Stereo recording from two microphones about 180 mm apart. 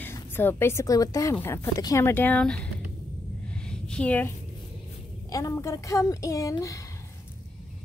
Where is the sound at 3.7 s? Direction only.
5° left (ahead or behind).